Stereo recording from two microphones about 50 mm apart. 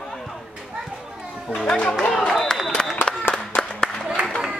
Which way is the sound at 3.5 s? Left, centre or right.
Centre.